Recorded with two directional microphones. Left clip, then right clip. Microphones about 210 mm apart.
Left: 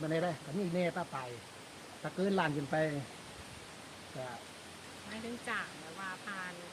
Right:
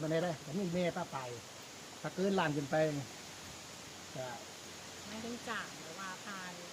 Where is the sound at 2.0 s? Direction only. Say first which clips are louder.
Left 1 dB; 10° right (ahead or behind).